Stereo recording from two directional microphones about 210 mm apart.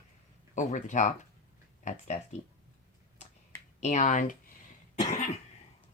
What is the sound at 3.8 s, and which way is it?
Speech, 35° left (ahead or behind).